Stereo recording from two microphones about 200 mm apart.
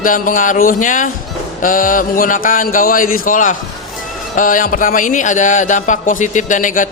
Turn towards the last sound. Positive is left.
turn(degrees=40)  # may be behind; listen again after turning